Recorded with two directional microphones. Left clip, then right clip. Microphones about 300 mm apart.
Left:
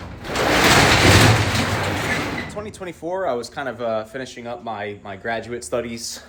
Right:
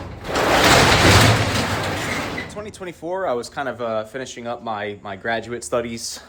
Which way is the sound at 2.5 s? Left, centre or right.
Centre.